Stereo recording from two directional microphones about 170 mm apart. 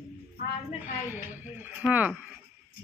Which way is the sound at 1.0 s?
10° right (ahead or behind).